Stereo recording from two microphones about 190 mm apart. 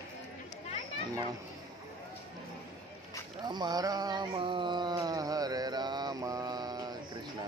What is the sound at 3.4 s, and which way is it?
Mantra, 20° right (ahead or behind).